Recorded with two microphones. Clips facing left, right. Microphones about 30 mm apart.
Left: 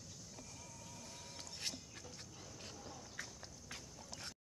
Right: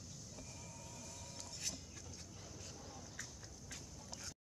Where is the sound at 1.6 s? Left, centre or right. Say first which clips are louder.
Left 2 dB; left.